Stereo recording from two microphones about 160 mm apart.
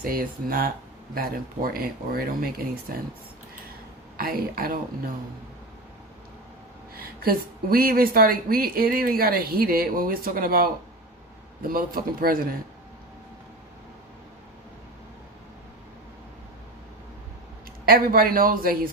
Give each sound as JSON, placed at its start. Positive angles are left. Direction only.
{"t": 0.0, "sound": "speech", "side_deg": -65}
{"t": 4.2, "sound": "speech", "side_deg": -65}
{"t": 6.9, "sound": "speech", "side_deg": -70}
{"t": 11.7, "sound": "speech", "side_deg": -65}
{"t": 17.8, "sound": "speech", "side_deg": -65}